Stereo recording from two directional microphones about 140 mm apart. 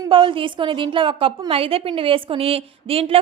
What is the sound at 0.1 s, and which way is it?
A woman's voice, 40° right (ahead or behind).